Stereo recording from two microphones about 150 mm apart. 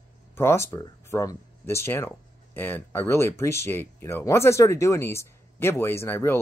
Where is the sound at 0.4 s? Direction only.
15° left (ahead or behind).